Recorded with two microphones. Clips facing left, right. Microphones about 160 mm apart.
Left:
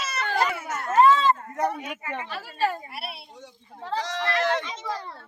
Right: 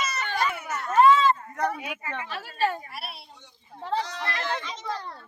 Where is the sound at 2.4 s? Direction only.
5° left (ahead or behind).